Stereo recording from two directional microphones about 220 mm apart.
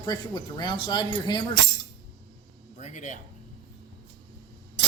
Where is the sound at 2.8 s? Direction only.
35° left (ahead or behind).